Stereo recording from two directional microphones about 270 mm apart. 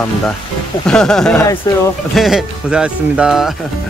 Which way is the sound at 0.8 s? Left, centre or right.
Centre.